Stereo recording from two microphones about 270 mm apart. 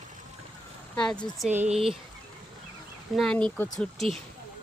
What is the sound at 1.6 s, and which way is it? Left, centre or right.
Speech, right.